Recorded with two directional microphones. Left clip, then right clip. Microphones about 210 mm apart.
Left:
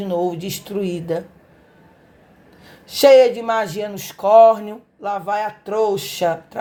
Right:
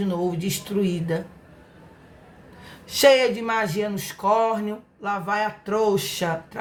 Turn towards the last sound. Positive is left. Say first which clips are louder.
# left 6 dB
turn(degrees=30)  # may be behind; listen again after turning